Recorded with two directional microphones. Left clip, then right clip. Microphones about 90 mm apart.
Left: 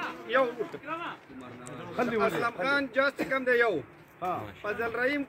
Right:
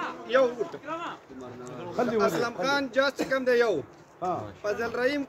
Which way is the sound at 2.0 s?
10° right (ahead or behind).